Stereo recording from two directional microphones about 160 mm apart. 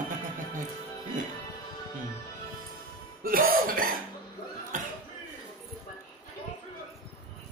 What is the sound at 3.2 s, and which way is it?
Music, 65° right (ahead or behind).